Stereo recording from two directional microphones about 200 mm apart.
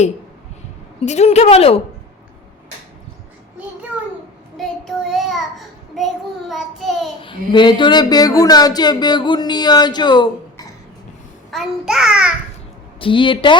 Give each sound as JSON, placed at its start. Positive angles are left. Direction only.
{"t": 1.0, "sound": "speech", "side_deg": 35}
{"t": 4.5, "sound": "child singing", "side_deg": 0}
{"t": 6.5, "sound": "a child's voice", "side_deg": 0}
{"t": 7.2, "sound": "speech", "side_deg": 25}
{"t": 11.5, "sound": "a child's voice", "side_deg": -5}
{"t": 13.0, "sound": "speech", "side_deg": 25}